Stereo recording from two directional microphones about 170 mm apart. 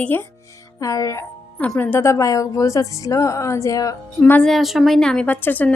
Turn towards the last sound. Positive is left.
turn(degrees=10)  # may be behind; listen again after turning